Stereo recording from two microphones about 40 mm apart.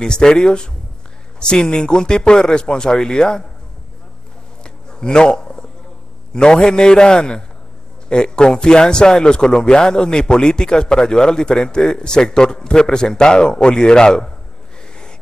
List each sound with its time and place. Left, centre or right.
0.0 s speech: centre
4.6 s a sound: left
6.3 s speech: left